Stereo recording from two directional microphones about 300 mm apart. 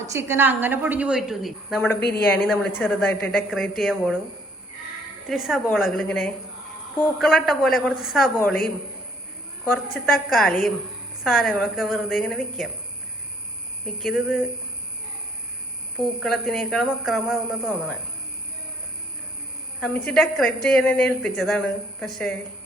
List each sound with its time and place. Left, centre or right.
0.1 s a woman's voice: centre
2.0 s a woman's voice: left
2.4 s a woman's voice: centre
5.3 s a woman's voice: centre
9.7 s a woman's voice: centre
13.8 s a woman's voice: centre
16.0 s a woman's voice: centre
20.1 s a woman's voice: centre